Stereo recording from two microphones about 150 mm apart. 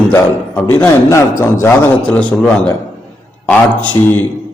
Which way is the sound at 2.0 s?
10° left (ahead or behind).